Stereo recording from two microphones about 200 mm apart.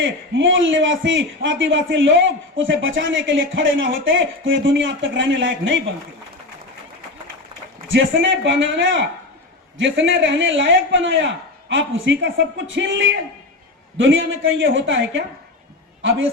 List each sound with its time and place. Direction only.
0.0 s a man's voice: 70° right (ahead or behind)
8.2 s a man's voice: 70° right (ahead or behind)